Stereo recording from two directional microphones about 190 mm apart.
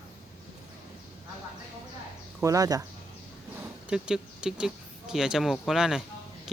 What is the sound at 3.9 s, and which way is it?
Speech, 5° right (ahead or behind).